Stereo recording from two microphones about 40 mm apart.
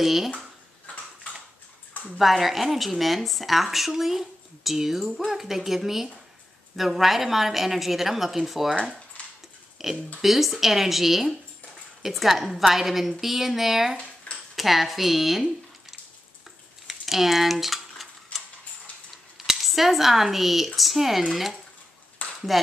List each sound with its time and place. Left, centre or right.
0.0 s speech: centre
2.1 s speech: centre
9.2 s a sound: left
9.8 s speech: centre
16.8 s typewriter: centre
19.3 s speech: centre
22.2 s a sound: left